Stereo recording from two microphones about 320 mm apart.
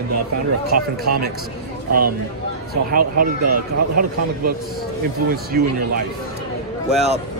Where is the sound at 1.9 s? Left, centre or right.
Right.